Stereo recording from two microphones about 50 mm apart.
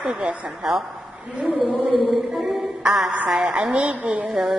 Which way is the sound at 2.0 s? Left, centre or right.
Centre.